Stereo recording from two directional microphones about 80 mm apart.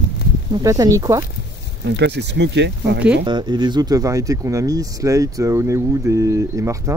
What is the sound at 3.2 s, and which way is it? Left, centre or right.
Speech, right.